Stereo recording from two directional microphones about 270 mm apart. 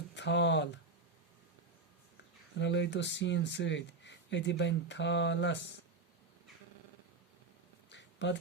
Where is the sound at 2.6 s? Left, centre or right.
Left.